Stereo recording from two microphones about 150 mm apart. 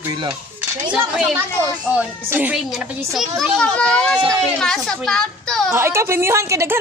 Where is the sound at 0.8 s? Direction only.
5° right (ahead or behind).